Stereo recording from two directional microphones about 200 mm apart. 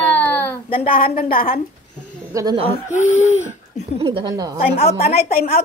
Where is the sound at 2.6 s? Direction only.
35° left (ahead or behind).